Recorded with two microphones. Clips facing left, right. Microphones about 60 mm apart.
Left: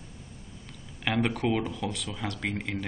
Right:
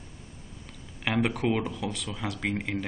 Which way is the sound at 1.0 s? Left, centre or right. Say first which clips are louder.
Right 1 dB; centre.